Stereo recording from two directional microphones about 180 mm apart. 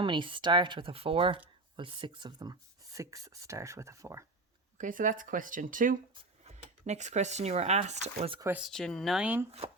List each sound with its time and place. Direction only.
0.0 s speech: 25° right (ahead or behind)
4.8 s speech: 45° right (ahead or behind)
8.4 s speech: 10° right (ahead or behind)
8.6 s speech: centre (ahead or behind)